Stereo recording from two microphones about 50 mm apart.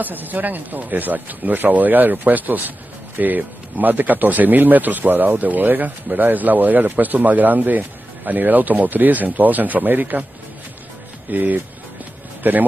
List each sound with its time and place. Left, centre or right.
0.0 s speech: right
11.3 s speech: right